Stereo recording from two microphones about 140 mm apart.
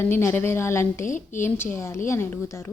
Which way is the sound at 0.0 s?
15° left (ahead or behind).